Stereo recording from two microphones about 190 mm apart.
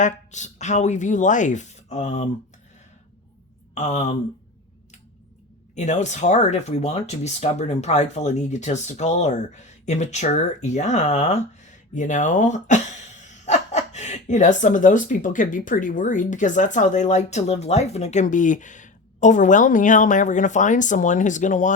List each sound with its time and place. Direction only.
0.0 s speech: 40° left (ahead or behind)
3.8 s speech: 35° left (ahead or behind)
5.7 s speech: 40° left (ahead or behind)